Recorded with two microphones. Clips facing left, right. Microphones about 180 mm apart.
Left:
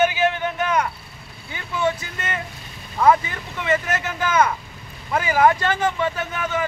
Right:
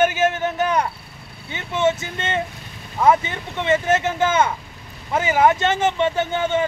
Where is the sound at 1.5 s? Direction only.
25° right (ahead or behind).